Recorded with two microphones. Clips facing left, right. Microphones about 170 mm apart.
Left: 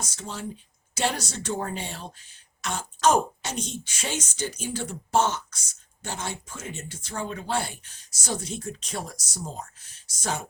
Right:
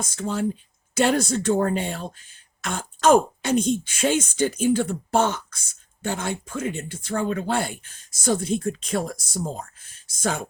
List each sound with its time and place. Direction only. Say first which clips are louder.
0.2 s speech: right 12 dB; 55° right (ahead or behind)